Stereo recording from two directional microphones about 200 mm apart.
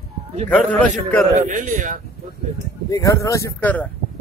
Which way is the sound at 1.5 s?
40° right (ahead or behind).